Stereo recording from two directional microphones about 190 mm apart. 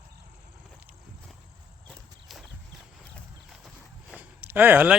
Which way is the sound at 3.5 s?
Centre (ahead or behind).